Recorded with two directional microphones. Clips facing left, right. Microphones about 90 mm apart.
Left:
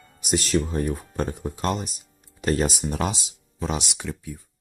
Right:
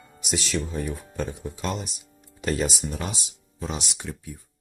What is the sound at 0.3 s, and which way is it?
Speech, 45° left (ahead or behind).